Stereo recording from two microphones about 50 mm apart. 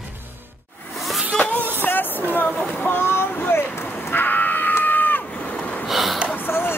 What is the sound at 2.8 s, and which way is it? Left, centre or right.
Vehicle, left.